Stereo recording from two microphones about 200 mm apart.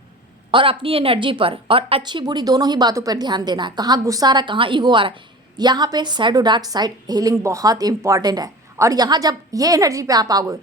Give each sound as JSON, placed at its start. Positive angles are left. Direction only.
{"t": 0.5, "sound": "a woman's voice", "side_deg": -25}